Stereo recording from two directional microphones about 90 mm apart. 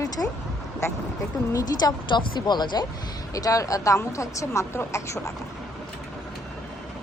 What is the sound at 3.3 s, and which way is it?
A woman's voice, 40° left (ahead or behind).